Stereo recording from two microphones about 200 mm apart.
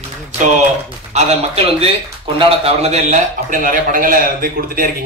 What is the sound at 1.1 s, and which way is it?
A man's voice, 35° right (ahead or behind).